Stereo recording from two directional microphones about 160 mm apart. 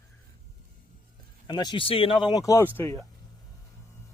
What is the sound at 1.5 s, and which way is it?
Speech, 30° left (ahead or behind).